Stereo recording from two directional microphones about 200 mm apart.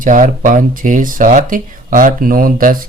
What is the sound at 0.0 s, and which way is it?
Speech, 40° right (ahead or behind).